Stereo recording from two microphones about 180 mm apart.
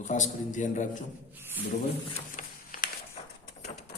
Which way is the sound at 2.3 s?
50° left (ahead or behind).